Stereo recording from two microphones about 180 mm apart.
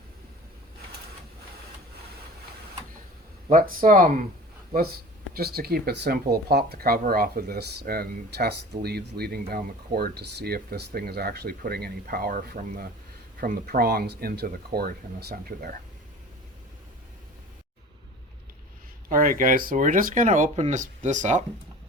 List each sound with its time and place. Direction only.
3.5 s speech: 50° right (ahead or behind)
5.4 s speech: 60° right (ahead or behind)
19.0 s speech: 50° right (ahead or behind)